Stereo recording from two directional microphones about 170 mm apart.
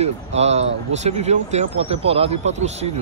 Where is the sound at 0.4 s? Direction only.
40° right (ahead or behind).